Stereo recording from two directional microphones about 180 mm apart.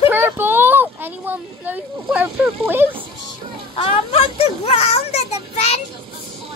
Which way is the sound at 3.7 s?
30° left (ahead or behind).